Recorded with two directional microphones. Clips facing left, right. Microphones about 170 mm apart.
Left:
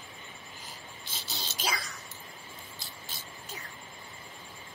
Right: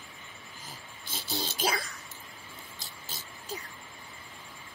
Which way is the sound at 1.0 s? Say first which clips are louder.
Right 8 dB; 50° right (ahead or behind).